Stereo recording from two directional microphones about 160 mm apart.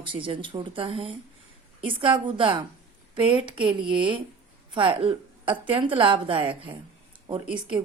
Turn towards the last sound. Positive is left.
turn(degrees=-30)  # may be behind; listen again after turning